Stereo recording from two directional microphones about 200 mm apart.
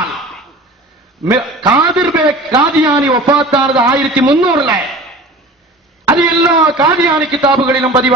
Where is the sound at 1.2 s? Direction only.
20° right (ahead or behind).